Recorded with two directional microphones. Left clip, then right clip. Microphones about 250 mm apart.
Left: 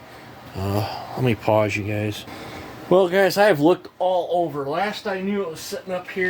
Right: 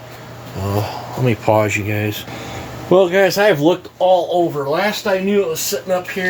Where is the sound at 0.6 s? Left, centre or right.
Left.